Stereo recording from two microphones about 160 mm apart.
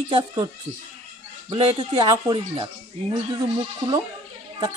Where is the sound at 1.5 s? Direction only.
35° right (ahead or behind).